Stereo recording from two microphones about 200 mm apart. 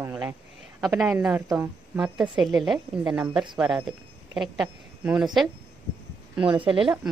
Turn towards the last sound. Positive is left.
turn(degrees=-25)  # may be behind; listen again after turning